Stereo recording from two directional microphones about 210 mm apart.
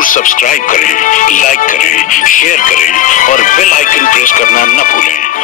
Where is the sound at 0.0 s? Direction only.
40° left (ahead or behind).